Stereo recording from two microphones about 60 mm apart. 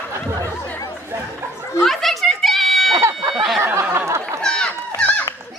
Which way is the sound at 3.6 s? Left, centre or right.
Right.